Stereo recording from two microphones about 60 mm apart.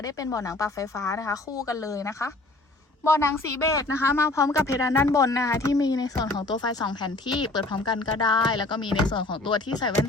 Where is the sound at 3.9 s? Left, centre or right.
Left.